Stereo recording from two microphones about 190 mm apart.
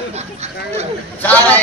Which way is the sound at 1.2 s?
10° left (ahead or behind).